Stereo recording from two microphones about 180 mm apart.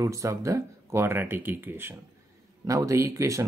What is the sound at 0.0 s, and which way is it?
Speech, 15° right (ahead or behind).